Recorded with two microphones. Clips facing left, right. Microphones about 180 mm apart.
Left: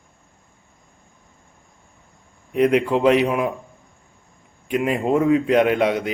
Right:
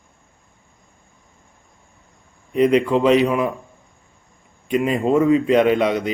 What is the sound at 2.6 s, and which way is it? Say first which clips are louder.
Speech: right 1 dB; 10° left (ahead or behind).